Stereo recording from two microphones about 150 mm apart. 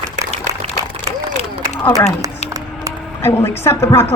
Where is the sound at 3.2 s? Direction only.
15° left (ahead or behind).